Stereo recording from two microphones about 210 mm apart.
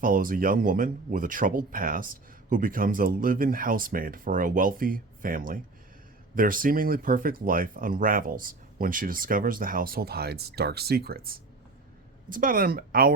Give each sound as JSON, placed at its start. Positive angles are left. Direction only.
{"t": 0.0, "sound": "speech", "side_deg": -40}